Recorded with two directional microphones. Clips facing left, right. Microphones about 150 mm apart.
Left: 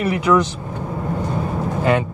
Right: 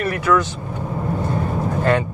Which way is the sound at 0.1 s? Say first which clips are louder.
Left 3 dB; 15° left (ahead or behind).